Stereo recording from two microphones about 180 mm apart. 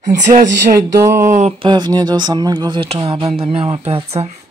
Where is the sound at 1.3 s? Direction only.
35° right (ahead or behind).